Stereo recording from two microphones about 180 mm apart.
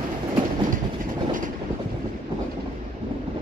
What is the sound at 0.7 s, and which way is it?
Vehicle, 50° right (ahead or behind).